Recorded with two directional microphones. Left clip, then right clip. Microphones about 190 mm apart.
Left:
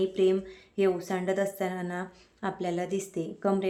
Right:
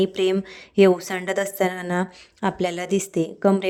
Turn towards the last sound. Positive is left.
turn(degrees=-50)  # may be behind; listen again after turning